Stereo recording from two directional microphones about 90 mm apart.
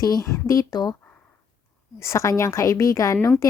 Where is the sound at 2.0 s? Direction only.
35° left (ahead or behind).